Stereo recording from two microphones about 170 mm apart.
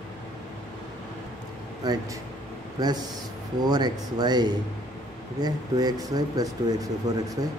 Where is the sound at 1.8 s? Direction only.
20° right (ahead or behind).